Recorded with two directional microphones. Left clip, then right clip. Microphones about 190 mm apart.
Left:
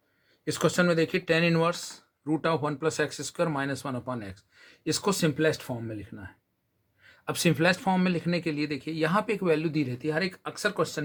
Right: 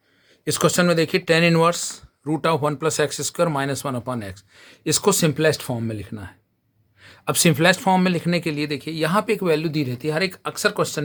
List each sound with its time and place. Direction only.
0.4 s speech: 40° right (ahead or behind)